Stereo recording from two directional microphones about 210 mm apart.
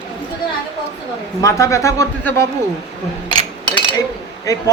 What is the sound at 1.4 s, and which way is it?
A man's voice, 15° left (ahead or behind).